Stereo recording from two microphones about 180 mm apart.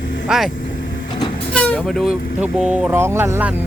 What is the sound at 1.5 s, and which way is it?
Speech, 5° left (ahead or behind).